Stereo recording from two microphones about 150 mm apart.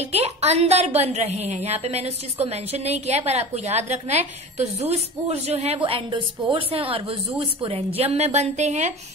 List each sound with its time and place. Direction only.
0.0 s a woman's voice: 45° right (ahead or behind)